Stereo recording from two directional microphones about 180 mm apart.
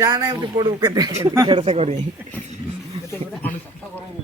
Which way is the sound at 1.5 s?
30° right (ahead or behind).